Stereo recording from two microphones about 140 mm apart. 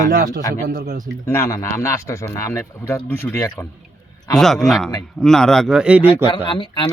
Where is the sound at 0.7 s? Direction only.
70° right (ahead or behind).